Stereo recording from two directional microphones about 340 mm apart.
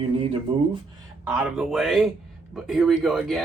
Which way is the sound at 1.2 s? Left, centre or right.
Centre.